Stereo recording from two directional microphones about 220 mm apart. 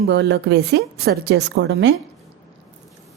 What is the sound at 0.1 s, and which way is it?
A woman's voice, 50° right (ahead or behind).